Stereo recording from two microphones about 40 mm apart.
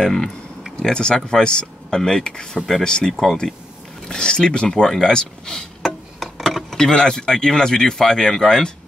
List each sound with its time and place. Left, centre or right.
0.0 s speech: centre
3.1 s speech: centre
4.1 s speech: centre